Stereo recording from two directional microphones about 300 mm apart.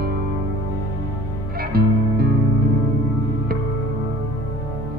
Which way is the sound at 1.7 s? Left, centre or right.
Right.